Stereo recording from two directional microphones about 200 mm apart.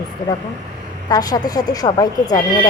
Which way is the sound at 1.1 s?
20° left (ahead or behind).